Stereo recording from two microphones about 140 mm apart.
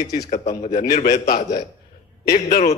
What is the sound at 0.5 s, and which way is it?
A man's voice, 90° left.